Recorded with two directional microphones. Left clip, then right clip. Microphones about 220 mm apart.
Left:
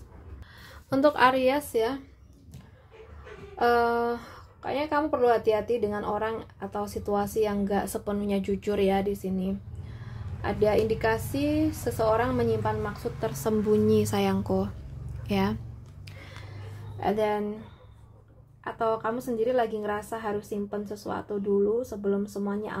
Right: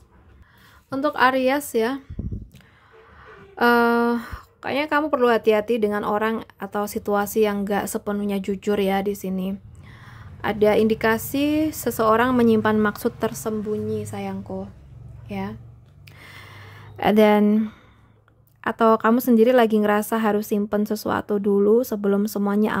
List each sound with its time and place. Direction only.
0.8 s a woman's voice: 10° right (ahead or behind)
1.1 s speech: 25° right (ahead or behind)
3.5 s speech: 40° right (ahead or behind)
13.3 s a woman's voice: 15° right (ahead or behind)
13.7 s a woman's voice: 5° left (ahead or behind)
16.1 s gasp: 20° right (ahead or behind)
17.0 s a woman's voice: 50° right (ahead or behind)